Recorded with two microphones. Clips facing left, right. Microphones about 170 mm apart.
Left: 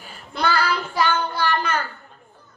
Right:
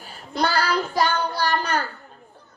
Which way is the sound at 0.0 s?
40° right (ahead or behind).